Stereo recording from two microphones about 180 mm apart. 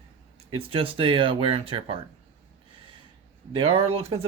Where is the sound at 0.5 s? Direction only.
30° right (ahead or behind).